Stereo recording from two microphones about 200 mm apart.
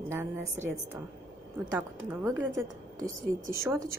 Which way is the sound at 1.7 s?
10° right (ahead or behind).